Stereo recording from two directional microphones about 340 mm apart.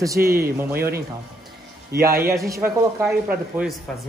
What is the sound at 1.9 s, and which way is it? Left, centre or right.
Speech, right.